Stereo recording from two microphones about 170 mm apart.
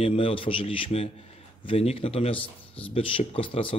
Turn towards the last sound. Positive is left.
turn(degrees=30)  # may be behind; listen again after turning